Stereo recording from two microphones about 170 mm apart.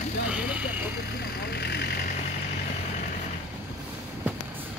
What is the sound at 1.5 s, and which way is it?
Vehicle, 75° left (ahead or behind).